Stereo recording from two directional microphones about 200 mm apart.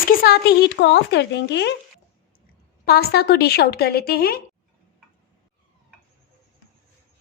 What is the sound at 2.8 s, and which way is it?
Speech, 50° left (ahead or behind).